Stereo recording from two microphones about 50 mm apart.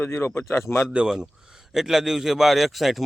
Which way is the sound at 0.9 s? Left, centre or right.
Centre.